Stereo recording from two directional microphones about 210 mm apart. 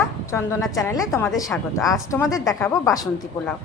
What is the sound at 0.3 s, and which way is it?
A woman's voice, 10° left (ahead or behind).